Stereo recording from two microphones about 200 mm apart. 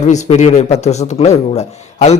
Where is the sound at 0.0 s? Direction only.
35° left (ahead or behind).